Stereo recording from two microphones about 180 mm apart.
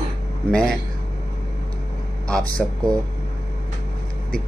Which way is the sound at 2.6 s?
Centre (ahead or behind).